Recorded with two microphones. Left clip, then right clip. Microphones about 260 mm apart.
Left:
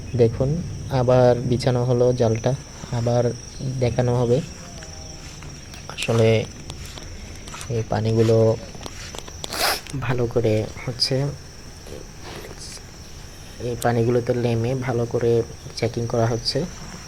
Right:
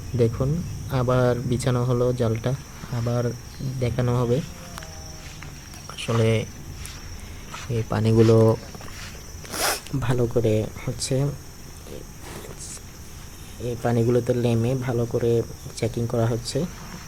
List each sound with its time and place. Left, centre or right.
0.2 s speech: centre
5.9 s a sound: centre
6.2 s speech: centre
7.9 s speech: right
9.5 s speech: right
13.6 s speech: centre